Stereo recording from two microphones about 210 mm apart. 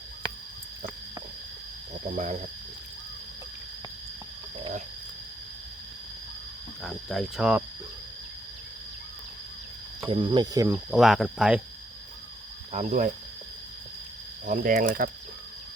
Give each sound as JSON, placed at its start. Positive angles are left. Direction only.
{"t": 2.1, "sound": "speech", "side_deg": -35}
{"t": 6.8, "sound": "speech", "side_deg": 0}
{"t": 10.1, "sound": "speech", "side_deg": -20}
{"t": 10.9, "sound": "speech", "side_deg": 0}
{"t": 12.7, "sound": "speech", "side_deg": -35}
{"t": 14.4, "sound": "speech", "side_deg": -40}